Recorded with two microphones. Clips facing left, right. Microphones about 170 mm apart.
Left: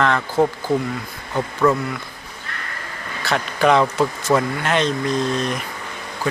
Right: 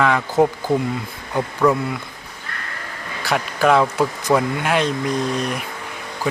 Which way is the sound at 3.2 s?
10° right (ahead or behind).